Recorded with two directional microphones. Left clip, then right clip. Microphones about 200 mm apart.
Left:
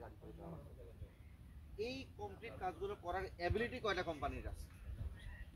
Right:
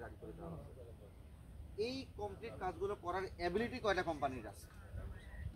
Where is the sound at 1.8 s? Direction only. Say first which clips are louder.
Right 4 dB; 55° right (ahead or behind).